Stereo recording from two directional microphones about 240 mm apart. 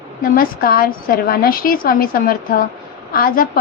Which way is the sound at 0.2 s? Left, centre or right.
Left.